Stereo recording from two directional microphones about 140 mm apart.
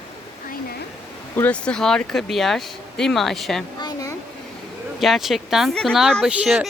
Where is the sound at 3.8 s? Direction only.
25° left (ahead or behind).